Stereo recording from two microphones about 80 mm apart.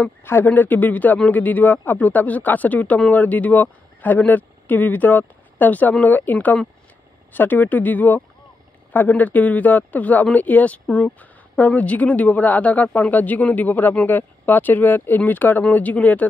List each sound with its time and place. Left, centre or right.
0.2 s speech: left